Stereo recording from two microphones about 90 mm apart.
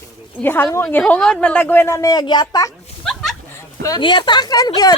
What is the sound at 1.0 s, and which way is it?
Speech, 10° left (ahead or behind).